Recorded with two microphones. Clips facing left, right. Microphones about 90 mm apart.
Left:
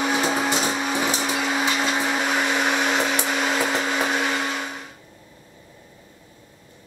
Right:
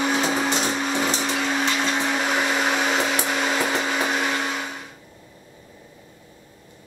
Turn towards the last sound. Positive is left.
turn(degrees=0)  # may be behind; listen again after turning